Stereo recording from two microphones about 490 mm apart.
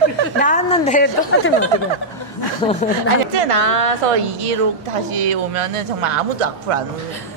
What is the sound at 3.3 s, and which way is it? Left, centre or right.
A woman's voice, right.